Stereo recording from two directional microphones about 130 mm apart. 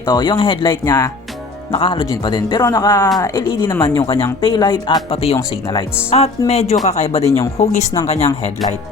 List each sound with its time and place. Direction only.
0.1 s speech: 35° left (ahead or behind)
0.9 s speech: 30° left (ahead or behind)
1.7 s speech: 45° left (ahead or behind); by 4.0 s 20° left (ahead or behind)
4.4 s speech: 30° left (ahead or behind)
5.2 s speech: 50° left (ahead or behind)